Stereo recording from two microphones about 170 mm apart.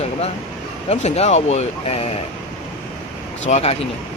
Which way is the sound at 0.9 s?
40° left (ahead or behind).